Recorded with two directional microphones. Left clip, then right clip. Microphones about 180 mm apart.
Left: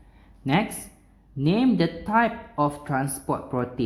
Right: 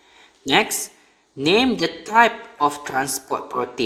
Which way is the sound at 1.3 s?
25° right (ahead or behind).